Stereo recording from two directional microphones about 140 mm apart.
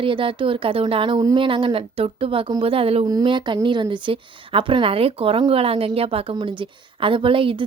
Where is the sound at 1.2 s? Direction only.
25° right (ahead or behind).